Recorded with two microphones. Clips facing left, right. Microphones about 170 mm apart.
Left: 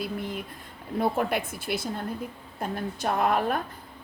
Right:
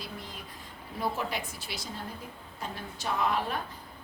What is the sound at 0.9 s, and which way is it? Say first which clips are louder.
A woman's voice: left 7 dB; 55° left (ahead or behind).